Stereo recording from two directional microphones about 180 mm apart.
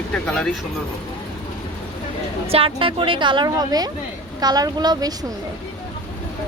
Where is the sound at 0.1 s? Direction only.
5° left (ahead or behind).